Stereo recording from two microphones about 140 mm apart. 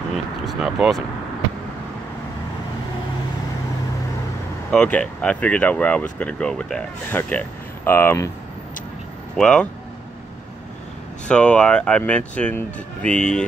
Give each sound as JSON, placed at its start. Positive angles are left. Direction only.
{"t": 0.1, "sound": "speech", "side_deg": -5}
{"t": 4.6, "sound": "speech", "side_deg": 10}
{"t": 9.4, "sound": "speech", "side_deg": 5}
{"t": 11.2, "sound": "speech", "side_deg": 10}